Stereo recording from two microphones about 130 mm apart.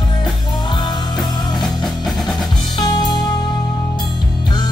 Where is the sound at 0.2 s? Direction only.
35° left (ahead or behind).